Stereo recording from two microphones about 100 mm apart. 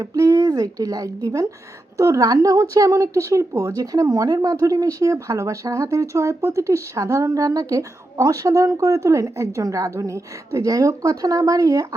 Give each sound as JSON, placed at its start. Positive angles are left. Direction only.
{"t": 0.0, "sound": "speech", "side_deg": -35}